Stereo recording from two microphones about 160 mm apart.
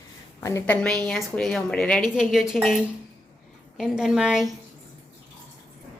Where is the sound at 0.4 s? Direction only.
15° left (ahead or behind).